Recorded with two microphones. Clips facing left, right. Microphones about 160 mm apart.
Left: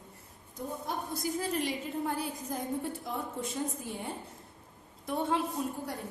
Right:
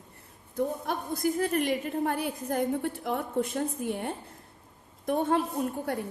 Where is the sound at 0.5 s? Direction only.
60° right (ahead or behind).